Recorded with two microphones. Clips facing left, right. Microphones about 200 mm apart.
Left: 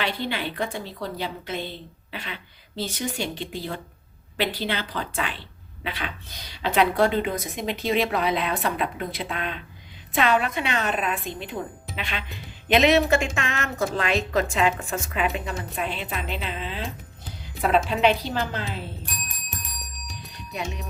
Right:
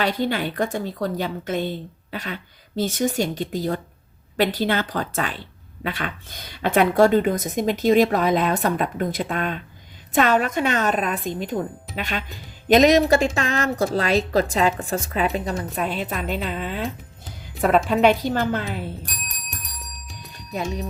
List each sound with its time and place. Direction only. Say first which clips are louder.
0.0 s a woman's voice: right 5 dB; 45° right (ahead or behind)
20.5 s speech: right 5 dB; 35° right (ahead or behind)